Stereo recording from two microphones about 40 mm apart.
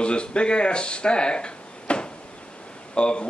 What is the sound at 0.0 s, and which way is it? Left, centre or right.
Speech, left.